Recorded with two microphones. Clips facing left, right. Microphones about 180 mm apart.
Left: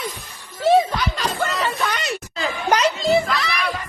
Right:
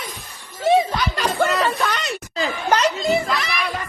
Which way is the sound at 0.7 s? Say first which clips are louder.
Left 1 dB; 10° right (ahead or behind).